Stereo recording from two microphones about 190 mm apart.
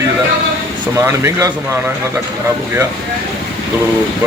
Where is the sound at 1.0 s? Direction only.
15° right (ahead or behind).